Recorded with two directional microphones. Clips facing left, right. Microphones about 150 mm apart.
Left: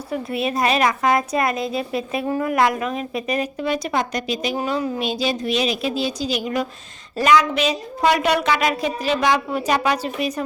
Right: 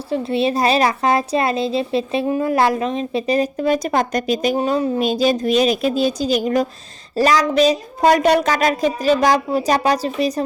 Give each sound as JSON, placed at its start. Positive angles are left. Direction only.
{"t": 0.1, "sound": "a woman's voice", "side_deg": -30}
{"t": 4.5, "sound": "a woman's voice", "side_deg": -35}